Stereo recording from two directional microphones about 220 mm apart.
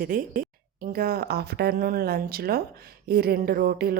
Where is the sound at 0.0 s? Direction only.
40° right (ahead or behind).